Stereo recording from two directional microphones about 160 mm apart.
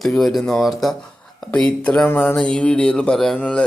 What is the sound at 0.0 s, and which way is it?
Speech, centre (ahead or behind).